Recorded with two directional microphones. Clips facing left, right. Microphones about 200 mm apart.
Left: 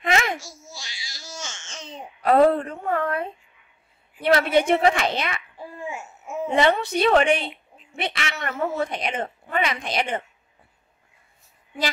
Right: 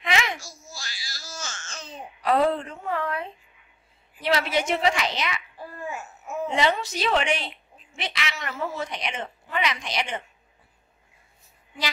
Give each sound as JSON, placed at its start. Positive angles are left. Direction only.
{"t": 0.0, "sound": "babbling", "side_deg": 50}
{"t": 0.4, "sound": "a sound", "side_deg": 20}
{"t": 1.1, "sound": "baby cry", "side_deg": 20}
{"t": 2.2, "sound": "a sound", "side_deg": 50}
{"t": 4.2, "sound": "a woman's voice", "side_deg": 55}
{"t": 5.6, "sound": "babbling", "side_deg": 25}
{"t": 6.5, "sound": "a woman's voice", "side_deg": 60}